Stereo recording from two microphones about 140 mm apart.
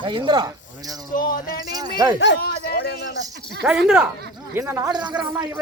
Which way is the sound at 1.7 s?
25° right (ahead or behind).